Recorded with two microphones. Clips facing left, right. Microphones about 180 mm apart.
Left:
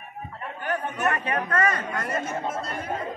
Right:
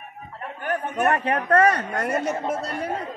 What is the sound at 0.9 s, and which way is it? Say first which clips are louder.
A man's voice: right 7 dB; 60° right (ahead or behind).